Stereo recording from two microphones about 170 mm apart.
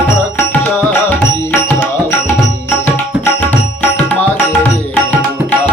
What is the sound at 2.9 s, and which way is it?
Tabla, 10° left (ahead or behind).